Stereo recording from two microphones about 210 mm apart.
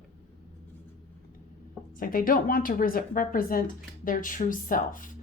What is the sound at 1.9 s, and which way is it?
Speech, 40° left (ahead or behind).